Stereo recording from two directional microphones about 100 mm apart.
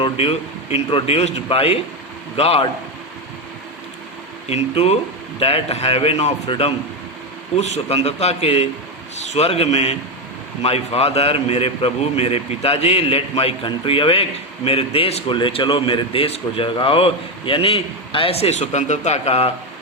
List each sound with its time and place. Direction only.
0.0 s a man's voice: 70° left (ahead or behind)
4.4 s speech: 90° left
5.4 s a man's voice: 75° left (ahead or behind)
7.5 s a man's voice: 90° left
13.7 s a man's voice: 65° left (ahead or behind); by 19.5 s 90° left